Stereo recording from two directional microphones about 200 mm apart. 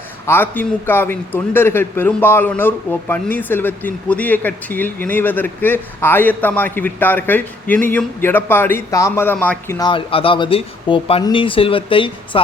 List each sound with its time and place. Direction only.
0.3 s a man's voice: 10° left (ahead or behind); by 12.4 s 25° left (ahead or behind)